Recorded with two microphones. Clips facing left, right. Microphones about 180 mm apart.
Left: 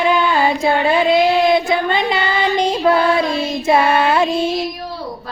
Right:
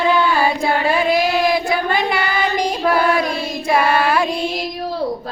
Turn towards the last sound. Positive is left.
turn(degrees=25)  # may be behind; listen again after turning